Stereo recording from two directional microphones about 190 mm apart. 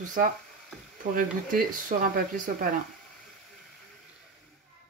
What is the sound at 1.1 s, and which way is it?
Speech, 45° right (ahead or behind).